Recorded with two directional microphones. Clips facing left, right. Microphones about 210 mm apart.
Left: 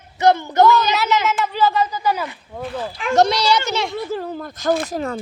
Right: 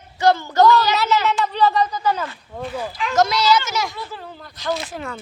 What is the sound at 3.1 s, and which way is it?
Speech, 35° left (ahead or behind).